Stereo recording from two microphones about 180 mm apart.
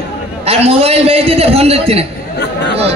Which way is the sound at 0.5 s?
35° right (ahead or behind).